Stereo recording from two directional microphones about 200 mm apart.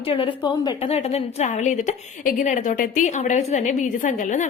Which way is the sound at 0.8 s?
30° left (ahead or behind).